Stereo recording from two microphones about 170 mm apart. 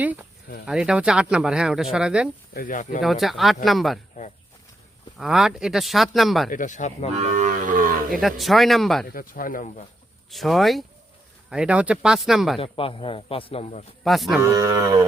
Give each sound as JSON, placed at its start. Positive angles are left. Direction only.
{"t": 0.7, "sound": "speech", "side_deg": -5}
{"t": 2.5, "sound": "speech", "side_deg": 55}
{"t": 3.0, "sound": "speech", "side_deg": 0}
{"t": 5.1, "sound": "speech", "side_deg": 0}
{"t": 6.5, "sound": "speech", "side_deg": 50}
{"t": 7.2, "sound": "livestock", "side_deg": -45}
{"t": 8.1, "sound": "speech", "side_deg": 0}
{"t": 9.1, "sound": "speech", "side_deg": 55}
{"t": 10.3, "sound": "speech", "side_deg": 0}
{"t": 12.5, "sound": "a man's voice", "side_deg": 35}
{"t": 14.0, "sound": "speech", "side_deg": 0}
{"t": 14.4, "sound": "speech", "side_deg": -15}